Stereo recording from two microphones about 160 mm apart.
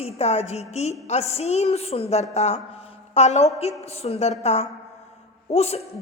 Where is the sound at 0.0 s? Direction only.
45° left (ahead or behind).